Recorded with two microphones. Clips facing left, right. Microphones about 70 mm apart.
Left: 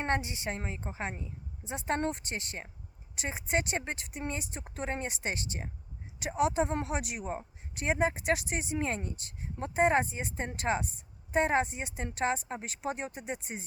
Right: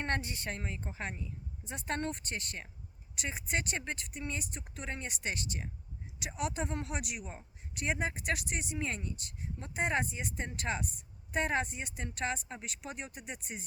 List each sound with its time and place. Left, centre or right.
0.0 s speech: centre